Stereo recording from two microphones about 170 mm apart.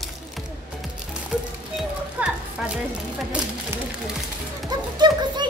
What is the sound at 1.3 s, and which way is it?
Music, 5° right (ahead or behind).